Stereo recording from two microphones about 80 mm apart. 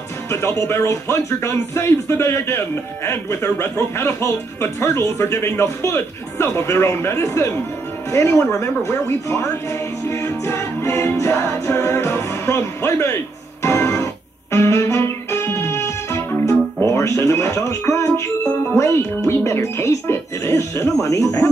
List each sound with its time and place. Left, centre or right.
0.3 s speech: left
13.6 s music: left
14.5 s speech: left
15.6 s music: left
18.8 s speech: left